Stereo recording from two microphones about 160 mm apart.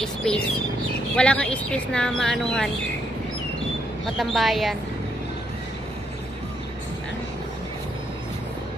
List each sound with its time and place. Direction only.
0.0 s speech: 5° left (ahead or behind)
4.2 s speech: centre (ahead or behind)